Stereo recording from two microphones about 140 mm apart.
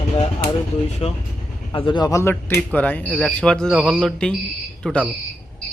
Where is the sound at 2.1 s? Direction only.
20° left (ahead or behind).